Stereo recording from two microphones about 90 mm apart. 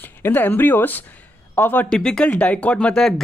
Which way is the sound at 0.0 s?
20° left (ahead or behind).